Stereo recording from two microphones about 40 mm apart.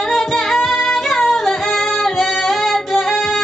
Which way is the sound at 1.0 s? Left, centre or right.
Centre.